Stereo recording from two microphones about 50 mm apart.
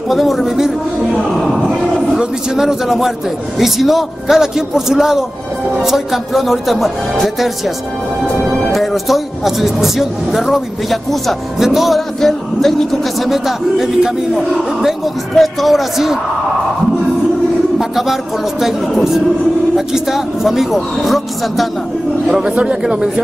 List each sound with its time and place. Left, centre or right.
0.1 s a sound: centre
2.1 s a man's voice: centre
12.2 s music: centre
13.2 s speech: centre
17.7 s speech: centre
22.6 s a man's voice: centre